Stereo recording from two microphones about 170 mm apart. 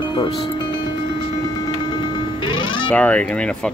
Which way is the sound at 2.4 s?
30° left (ahead or behind).